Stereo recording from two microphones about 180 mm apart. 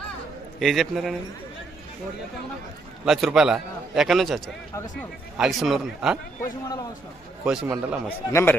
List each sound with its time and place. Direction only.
0.6 s a man's voice: centre (ahead or behind)
3.1 s a man's voice: centre (ahead or behind)
5.4 s a man's voice: centre (ahead or behind)
7.4 s a man's voice: 5° right (ahead or behind)
7.7 s a man's voice: 15° right (ahead or behind)
8.0 s a man's voice: 15° left (ahead or behind)